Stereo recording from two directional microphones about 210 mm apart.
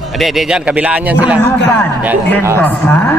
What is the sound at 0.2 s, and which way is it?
Speech, centre (ahead or behind).